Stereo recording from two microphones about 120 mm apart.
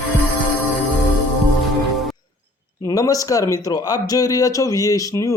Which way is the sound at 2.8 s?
30° left (ahead or behind).